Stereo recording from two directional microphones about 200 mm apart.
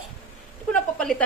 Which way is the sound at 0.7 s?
5° left (ahead or behind).